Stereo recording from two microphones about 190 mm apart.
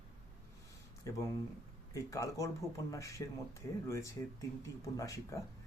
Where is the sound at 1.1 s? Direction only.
15° left (ahead or behind).